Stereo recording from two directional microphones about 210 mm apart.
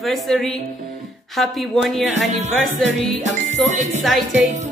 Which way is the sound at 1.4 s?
Centre (ahead or behind).